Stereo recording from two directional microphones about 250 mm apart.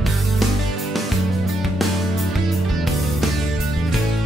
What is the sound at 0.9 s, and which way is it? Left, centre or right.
Music, centre.